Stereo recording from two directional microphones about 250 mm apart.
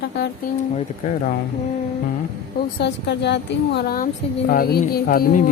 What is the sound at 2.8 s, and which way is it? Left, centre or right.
A woman's voice, left.